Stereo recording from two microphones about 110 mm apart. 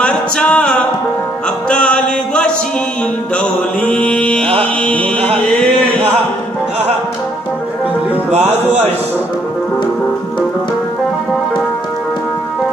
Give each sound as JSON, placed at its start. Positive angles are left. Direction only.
{"t": 0.0, "sound": "music", "side_deg": 10}
{"t": 3.8, "sound": "mantra", "side_deg": 10}
{"t": 4.6, "sound": "music", "side_deg": 15}
{"t": 8.3, "sound": "speech", "side_deg": -75}